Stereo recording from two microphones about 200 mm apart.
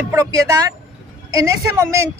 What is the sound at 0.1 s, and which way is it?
Speech, 15° right (ahead or behind).